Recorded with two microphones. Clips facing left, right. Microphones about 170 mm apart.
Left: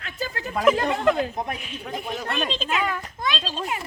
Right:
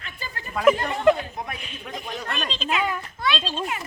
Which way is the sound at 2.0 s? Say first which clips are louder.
Left 3 dB; 5° left (ahead or behind).